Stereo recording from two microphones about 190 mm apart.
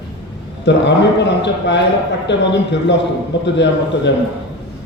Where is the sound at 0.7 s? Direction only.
65° left (ahead or behind).